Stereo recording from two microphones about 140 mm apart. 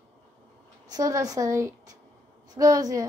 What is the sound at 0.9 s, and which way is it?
A woman's voice, 25° right (ahead or behind).